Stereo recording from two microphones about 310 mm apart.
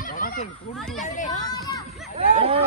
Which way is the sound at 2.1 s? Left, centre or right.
Centre.